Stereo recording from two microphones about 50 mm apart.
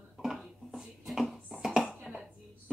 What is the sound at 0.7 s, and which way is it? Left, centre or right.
Hands, centre.